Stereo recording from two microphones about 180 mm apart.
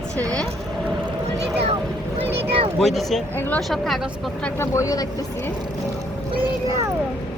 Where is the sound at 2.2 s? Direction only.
35° right (ahead or behind).